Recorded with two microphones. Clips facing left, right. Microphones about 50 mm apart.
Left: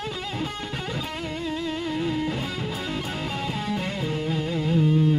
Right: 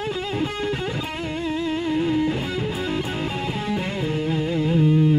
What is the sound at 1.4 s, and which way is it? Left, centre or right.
Music, centre.